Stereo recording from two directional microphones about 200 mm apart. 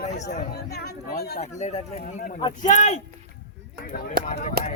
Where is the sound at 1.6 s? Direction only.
35° left (ahead or behind).